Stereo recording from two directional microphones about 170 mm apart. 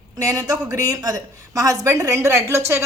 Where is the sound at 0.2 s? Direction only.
20° right (ahead or behind).